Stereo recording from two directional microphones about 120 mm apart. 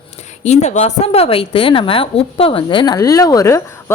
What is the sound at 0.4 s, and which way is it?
A woman's voice, 70° left (ahead or behind).